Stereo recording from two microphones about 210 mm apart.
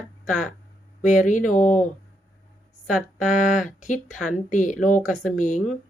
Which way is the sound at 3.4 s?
40° left (ahead or behind).